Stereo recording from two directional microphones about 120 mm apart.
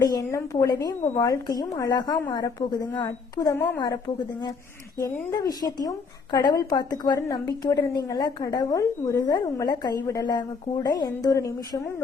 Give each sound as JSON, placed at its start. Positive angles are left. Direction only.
{"t": 0.0, "sound": "a woman's voice", "side_deg": 30}